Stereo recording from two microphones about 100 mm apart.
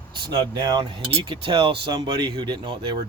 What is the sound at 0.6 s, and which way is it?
Speech, 45° right (ahead or behind).